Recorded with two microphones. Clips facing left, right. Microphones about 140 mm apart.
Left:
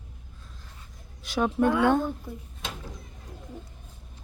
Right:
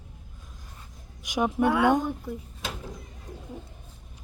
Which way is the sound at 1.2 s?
15° right (ahead or behind).